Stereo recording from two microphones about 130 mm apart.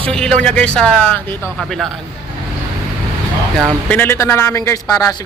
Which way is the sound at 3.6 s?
10° left (ahead or behind).